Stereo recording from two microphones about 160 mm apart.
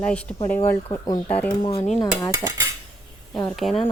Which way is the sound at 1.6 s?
40° left (ahead or behind).